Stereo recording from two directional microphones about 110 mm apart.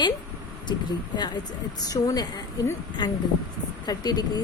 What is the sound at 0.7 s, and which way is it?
A woman's voice, 40° left (ahead or behind).